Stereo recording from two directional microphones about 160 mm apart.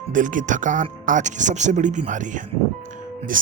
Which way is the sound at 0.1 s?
55° right (ahead or behind).